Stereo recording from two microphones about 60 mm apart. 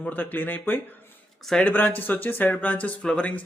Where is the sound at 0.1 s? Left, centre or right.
Left.